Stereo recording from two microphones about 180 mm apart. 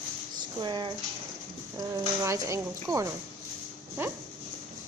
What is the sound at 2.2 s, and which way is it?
A woman's voice, 15° right (ahead or behind).